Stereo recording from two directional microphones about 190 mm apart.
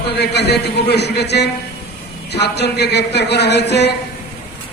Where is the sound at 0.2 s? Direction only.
60° left (ahead or behind).